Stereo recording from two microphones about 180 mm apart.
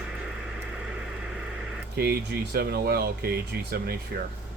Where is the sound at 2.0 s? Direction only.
60° right (ahead or behind).